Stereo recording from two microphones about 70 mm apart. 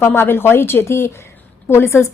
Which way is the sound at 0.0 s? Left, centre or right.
Left.